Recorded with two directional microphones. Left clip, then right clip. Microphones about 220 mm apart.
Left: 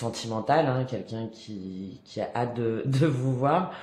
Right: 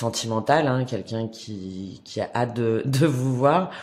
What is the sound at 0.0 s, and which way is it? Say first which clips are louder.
Speech: right 5 dB; 50° right (ahead or behind).